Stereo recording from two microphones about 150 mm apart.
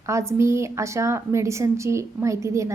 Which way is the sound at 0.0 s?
20° right (ahead or behind).